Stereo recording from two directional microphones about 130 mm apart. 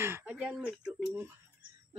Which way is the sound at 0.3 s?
5° right (ahead or behind).